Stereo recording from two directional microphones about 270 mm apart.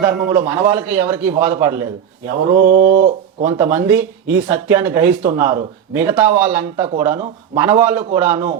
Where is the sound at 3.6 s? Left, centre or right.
Centre.